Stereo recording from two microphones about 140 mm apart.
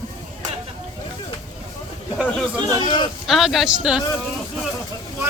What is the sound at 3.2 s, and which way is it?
Speech, centre (ahead or behind).